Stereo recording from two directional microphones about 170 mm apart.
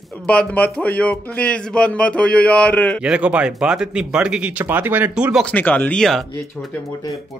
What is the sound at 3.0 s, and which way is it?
Speech, 5° right (ahead or behind).